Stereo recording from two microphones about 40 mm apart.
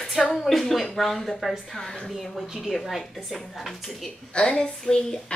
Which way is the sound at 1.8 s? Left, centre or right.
Centre.